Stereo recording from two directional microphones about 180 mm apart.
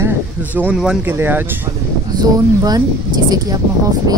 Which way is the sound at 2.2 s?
20° right (ahead or behind).